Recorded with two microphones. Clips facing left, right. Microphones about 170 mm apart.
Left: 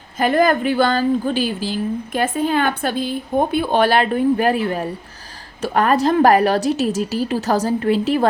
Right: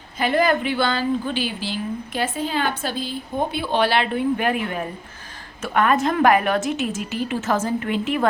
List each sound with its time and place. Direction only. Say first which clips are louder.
0.2 s a woman's voice: left 4 dB; 45° left (ahead or behind)